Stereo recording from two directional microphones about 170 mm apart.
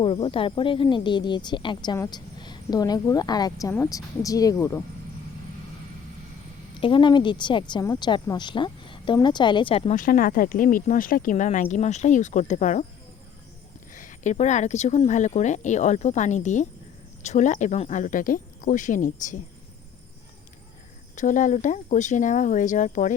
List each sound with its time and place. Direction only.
0.0 s speech: 30° left (ahead or behind)
6.7 s speech: 30° left (ahead or behind)
9.9 s speech: 55° left (ahead or behind)
13.9 s speech: 50° left (ahead or behind)
21.2 s speech: 50° left (ahead or behind)